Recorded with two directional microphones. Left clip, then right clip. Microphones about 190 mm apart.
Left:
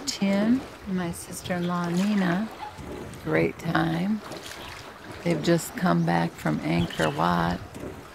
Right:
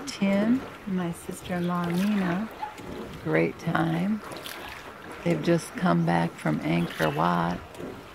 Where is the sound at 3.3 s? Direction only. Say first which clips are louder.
Left 1 dB; 10° left (ahead or behind).